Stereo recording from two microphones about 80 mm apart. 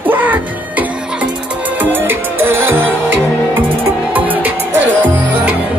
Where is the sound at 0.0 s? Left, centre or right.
Right.